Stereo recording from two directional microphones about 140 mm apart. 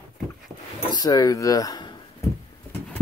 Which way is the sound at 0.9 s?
30° left (ahead or behind).